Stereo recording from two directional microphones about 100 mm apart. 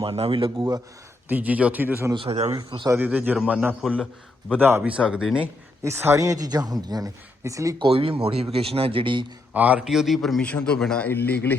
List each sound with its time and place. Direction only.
0.0 s speech: 70° right (ahead or behind)
1.3 s speech: 15° right (ahead or behind)
2.1 s speech: 75° right (ahead or behind)
2.9 s speech: 15° right (ahead or behind)
5.8 s a woman's voice: 25° right (ahead or behind)
7.8 s speech: 65° right (ahead or behind)
9.5 s speech: 15° right (ahead or behind)
9.9 s a man's voice: centre (ahead or behind)
11.1 s a man's voice: 20° left (ahead or behind)